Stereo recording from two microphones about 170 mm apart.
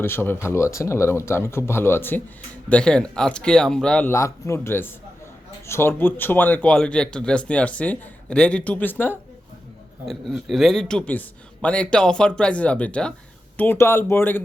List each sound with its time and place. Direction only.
0.0 s a man's voice: 15° left (ahead or behind)
4.1 s speech: 15° left (ahead or behind)
10.1 s a man's voice: centre (ahead or behind)